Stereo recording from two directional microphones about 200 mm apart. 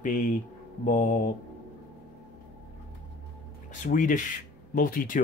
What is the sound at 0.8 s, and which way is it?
Speech, 40° left (ahead or behind).